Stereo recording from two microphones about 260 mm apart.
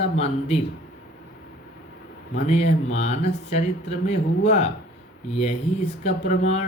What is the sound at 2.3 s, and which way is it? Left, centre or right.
Speech, left.